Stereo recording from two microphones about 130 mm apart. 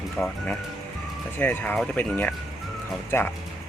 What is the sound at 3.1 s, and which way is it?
Speech, 15° left (ahead or behind).